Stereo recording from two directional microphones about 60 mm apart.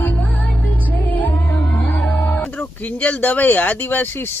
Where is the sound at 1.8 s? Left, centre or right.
Left.